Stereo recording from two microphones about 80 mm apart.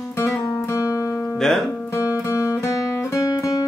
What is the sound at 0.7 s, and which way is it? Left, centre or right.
Music, left.